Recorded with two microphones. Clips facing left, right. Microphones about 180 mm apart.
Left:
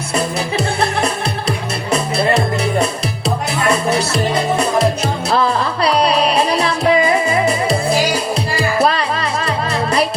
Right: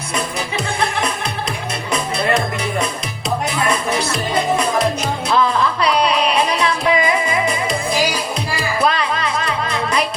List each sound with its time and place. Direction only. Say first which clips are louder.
0.1 s music: left 4 dB; 30° left (ahead or behind)